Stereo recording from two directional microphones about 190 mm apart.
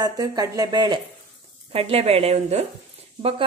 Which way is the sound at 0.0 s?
20° right (ahead or behind).